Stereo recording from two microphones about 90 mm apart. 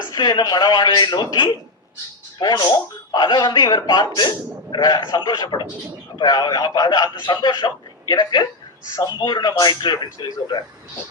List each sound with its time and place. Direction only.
0.1 s a man's voice: 55° left (ahead or behind)